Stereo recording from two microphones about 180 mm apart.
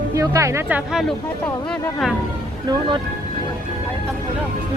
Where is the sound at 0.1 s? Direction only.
15° right (ahead or behind).